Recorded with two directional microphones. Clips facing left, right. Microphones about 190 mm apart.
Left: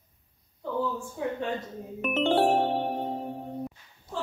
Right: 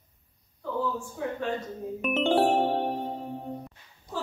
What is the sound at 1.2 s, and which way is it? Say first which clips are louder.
Speech: left 2 dB; 20° left (ahead or behind).